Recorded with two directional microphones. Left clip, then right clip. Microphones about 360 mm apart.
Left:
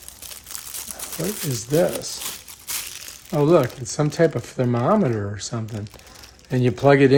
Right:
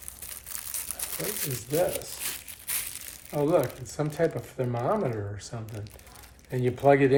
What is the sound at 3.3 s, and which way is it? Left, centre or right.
Speech, left.